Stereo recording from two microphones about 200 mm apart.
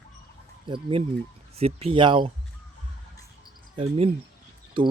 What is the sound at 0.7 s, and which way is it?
Speech, 25° right (ahead or behind).